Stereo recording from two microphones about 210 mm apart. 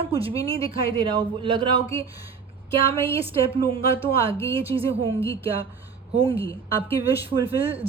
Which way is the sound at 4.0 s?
25° right (ahead or behind).